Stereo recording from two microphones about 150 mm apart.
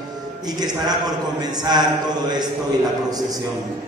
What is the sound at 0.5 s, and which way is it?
A man's voice, 25° right (ahead or behind).